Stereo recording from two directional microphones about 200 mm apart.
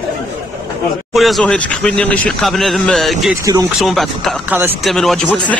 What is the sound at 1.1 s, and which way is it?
Speech, centre (ahead or behind).